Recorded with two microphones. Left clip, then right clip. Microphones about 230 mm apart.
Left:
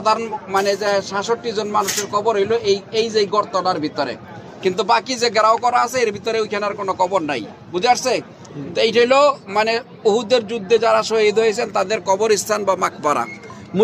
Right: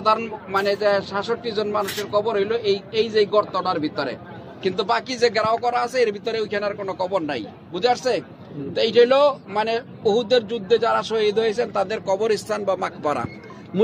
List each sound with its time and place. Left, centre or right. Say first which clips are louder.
0.0 s a man's voice: left 2 dB; left